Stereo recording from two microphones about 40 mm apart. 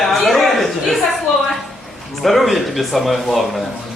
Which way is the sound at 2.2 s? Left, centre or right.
Centre.